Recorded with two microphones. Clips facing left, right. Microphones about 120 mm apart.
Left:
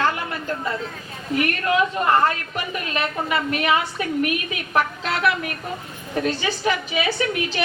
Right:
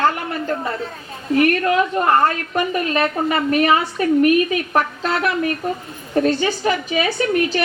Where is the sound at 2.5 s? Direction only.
40° right (ahead or behind).